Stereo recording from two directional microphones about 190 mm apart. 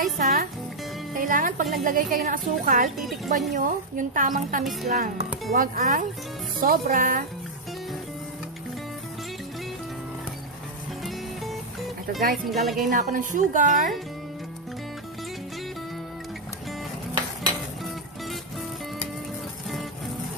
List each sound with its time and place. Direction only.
0.2 s a woman's voice: 50° right (ahead or behind)
12.4 s speech: centre (ahead or behind)
12.9 s a woman's voice: 45° right (ahead or behind)